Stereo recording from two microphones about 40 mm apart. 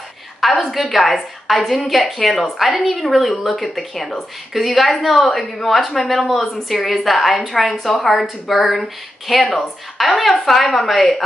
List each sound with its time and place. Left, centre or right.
0.4 s a woman's voice: centre
7.9 s speech: centre
8.2 s a woman's voice: centre